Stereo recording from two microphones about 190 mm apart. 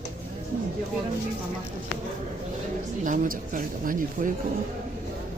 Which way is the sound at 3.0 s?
45° right (ahead or behind).